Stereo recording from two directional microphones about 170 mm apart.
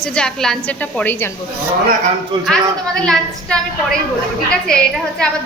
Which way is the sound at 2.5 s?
5° left (ahead or behind).